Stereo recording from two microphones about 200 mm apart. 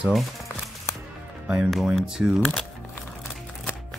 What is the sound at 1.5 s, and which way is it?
Speech, centre (ahead or behind).